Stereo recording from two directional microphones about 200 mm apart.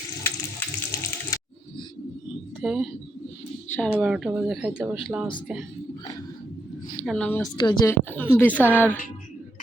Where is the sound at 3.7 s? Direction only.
5° left (ahead or behind).